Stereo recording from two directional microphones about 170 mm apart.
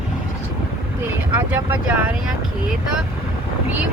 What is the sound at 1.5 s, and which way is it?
Speech, 10° right (ahead or behind).